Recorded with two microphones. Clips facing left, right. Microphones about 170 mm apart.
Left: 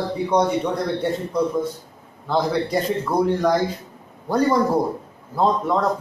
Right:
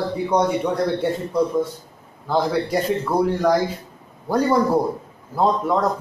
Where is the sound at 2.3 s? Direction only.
5° right (ahead or behind).